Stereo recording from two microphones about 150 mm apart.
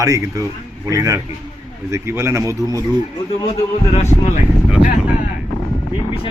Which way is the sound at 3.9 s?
50° left (ahead or behind).